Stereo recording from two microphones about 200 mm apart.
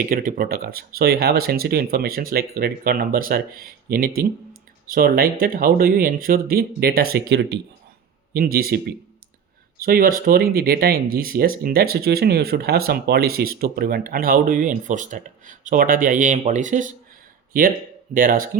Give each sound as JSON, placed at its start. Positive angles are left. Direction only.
{"t": 0.1, "sound": "speech", "side_deg": -45}
{"t": 9.8, "sound": "speech", "side_deg": -45}
{"t": 18.1, "sound": "speech", "side_deg": -45}